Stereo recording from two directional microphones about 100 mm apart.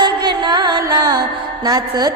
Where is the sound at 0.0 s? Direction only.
45° right (ahead or behind).